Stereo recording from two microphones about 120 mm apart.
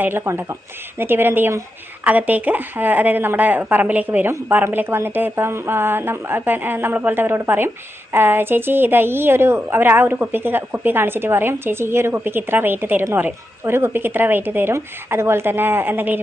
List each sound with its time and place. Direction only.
0.0 s speech: 20° right (ahead or behind)